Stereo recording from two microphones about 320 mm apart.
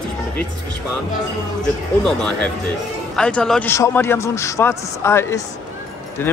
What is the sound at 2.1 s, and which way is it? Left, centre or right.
A man's voice, centre.